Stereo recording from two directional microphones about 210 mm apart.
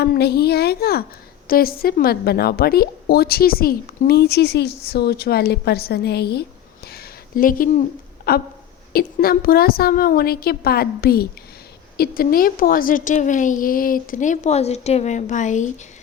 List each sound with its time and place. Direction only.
0.0 s a woman's voice: 50° left (ahead or behind)
6.8 s a sound: 45° left (ahead or behind)
8.3 s a woman's voice: 45° left (ahead or behind)